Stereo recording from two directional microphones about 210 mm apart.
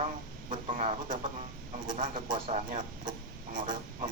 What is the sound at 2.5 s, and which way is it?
Speech, 35° right (ahead or behind).